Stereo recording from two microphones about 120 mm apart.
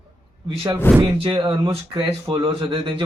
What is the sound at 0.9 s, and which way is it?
Speech, 15° left (ahead or behind).